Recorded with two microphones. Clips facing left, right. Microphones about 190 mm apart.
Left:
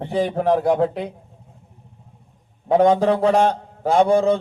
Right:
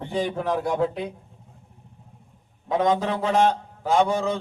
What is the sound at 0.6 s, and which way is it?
Speech, 55° left (ahead or behind).